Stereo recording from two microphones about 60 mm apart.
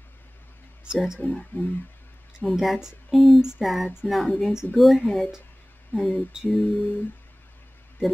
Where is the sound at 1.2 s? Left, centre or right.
Left.